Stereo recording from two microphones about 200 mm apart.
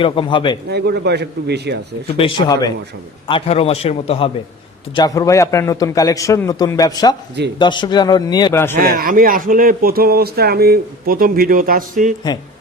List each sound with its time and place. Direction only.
0.0 s a man's voice: 25° left (ahead or behind)
0.7 s a man's voice: 55° right (ahead or behind)
2.0 s a man's voice: 25° left (ahead or behind)
4.9 s a man's voice: 15° left (ahead or behind)
8.8 s speech: 45° right (ahead or behind)